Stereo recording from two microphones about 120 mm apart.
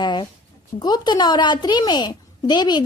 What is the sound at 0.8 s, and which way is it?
A woman's voice, 35° left (ahead or behind).